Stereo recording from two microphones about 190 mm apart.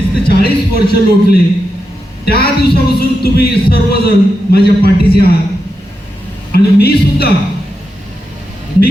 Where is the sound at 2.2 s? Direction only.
55° left (ahead or behind).